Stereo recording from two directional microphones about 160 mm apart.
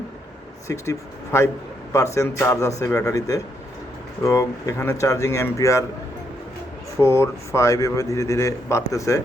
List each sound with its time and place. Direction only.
0.7 s a man's voice: 15° left (ahead or behind)
7.0 s a man's voice: 15° left (ahead or behind)